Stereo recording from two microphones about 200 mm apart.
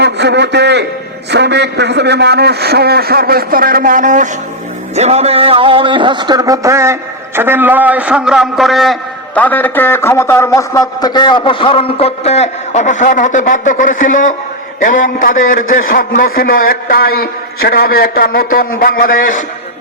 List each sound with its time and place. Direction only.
0.0 s a man's voice: 60° right (ahead or behind); by 19.5 s 45° left (ahead or behind)